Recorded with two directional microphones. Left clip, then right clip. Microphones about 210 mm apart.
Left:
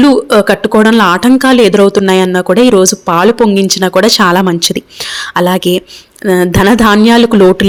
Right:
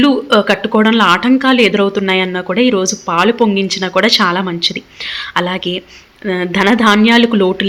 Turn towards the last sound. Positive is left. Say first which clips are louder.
# left 6 dB
turn(degrees=50)  # may be behind; listen again after turning